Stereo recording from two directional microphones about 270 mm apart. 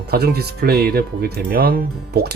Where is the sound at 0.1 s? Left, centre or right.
Right.